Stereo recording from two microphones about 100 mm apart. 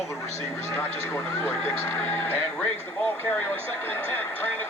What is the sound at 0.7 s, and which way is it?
Speech, 25° left (ahead or behind).